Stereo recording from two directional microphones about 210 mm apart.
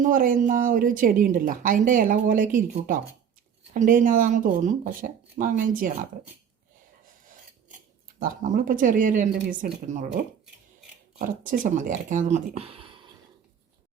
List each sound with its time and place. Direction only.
0.0 s a woman's voice: 40° right (ahead or behind)
8.2 s a woman's voice: 40° right (ahead or behind)
11.2 s a woman's voice: 40° right (ahead or behind); by 13.1 s 25° right (ahead or behind)